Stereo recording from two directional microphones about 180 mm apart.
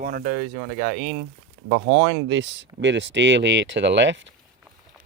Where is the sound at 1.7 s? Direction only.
85° right.